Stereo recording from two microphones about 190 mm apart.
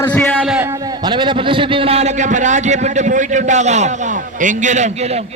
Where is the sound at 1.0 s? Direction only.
25° right (ahead or behind).